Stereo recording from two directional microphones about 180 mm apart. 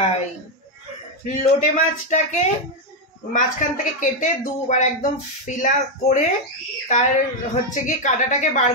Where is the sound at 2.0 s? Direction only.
40° left (ahead or behind).